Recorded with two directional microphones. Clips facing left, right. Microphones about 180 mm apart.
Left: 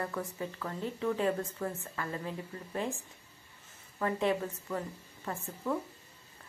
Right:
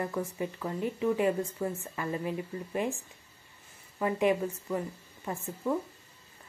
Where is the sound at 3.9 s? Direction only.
15° right (ahead or behind).